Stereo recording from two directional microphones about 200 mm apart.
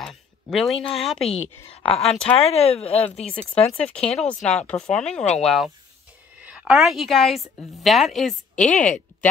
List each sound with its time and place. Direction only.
0.0 s a sound: centre (ahead or behind)
0.9 s a woman's voice: centre (ahead or behind)
1.3 s a woman's voice: 30° left (ahead or behind)
2.0 s a woman's voice: 5° left (ahead or behind)
2.3 s speech: 30° left (ahead or behind)
3.7 s a woman's voice: 5° left (ahead or behind)
8.5 s speech: 35° left (ahead or behind)